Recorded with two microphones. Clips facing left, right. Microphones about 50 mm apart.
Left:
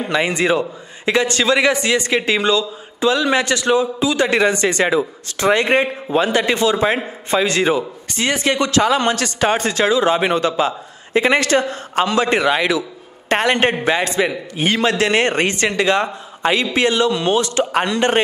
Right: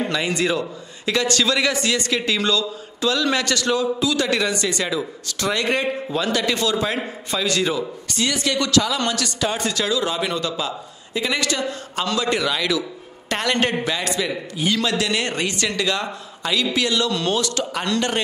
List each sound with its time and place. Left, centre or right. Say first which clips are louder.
0.1 s a man's voice: left 5 dB; left